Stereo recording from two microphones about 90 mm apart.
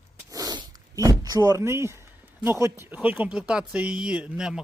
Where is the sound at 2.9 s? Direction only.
20° right (ahead or behind).